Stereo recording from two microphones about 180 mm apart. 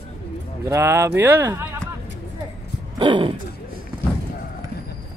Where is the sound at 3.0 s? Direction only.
30° right (ahead or behind).